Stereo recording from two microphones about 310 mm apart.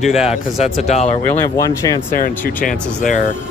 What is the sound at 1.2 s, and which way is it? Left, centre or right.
Speech, centre.